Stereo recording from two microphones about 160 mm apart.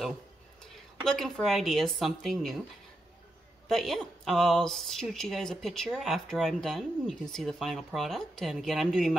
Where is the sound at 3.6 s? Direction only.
Centre (ahead or behind).